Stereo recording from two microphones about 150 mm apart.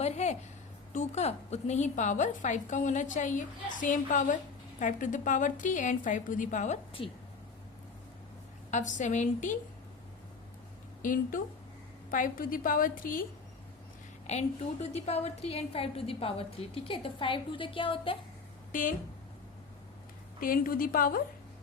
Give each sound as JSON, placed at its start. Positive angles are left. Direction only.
{"t": 0.0, "sound": "a sound", "side_deg": 50}
{"t": 0.9, "sound": "a woman's voice", "side_deg": 45}
{"t": 8.7, "sound": "a woman's voice", "side_deg": 55}
{"t": 11.0, "sound": "a woman's voice", "side_deg": 65}
{"t": 14.3, "sound": "a woman's voice", "side_deg": 50}
{"t": 18.7, "sound": "a woman's voice", "side_deg": 60}
{"t": 20.4, "sound": "a woman's voice", "side_deg": 70}